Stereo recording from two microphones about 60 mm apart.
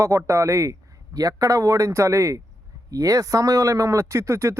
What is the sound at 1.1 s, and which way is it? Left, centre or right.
Speech, right.